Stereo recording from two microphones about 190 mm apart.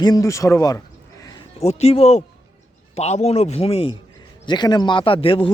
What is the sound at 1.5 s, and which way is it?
Speech, 35° left (ahead or behind).